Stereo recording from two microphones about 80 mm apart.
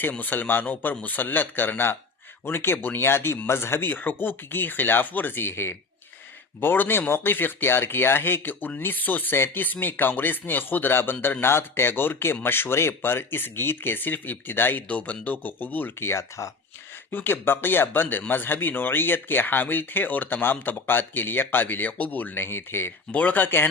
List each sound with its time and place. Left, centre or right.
0.0 s speech: left
17.1 s speech: left